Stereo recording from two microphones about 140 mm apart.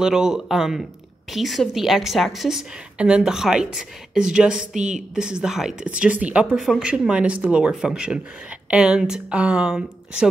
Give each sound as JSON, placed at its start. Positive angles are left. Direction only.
{"t": 0.0, "sound": "a woman's voice", "side_deg": -5}
{"t": 4.7, "sound": "a woman's voice", "side_deg": -60}
{"t": 5.1, "sound": "speech", "side_deg": -5}